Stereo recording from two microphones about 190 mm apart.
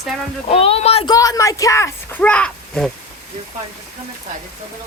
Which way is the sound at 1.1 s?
20° left (ahead or behind).